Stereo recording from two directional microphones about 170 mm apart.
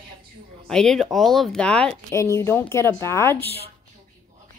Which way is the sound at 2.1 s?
15° left (ahead or behind).